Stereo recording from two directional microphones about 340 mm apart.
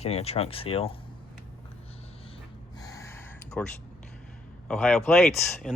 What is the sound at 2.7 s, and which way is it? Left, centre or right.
Gasp, centre.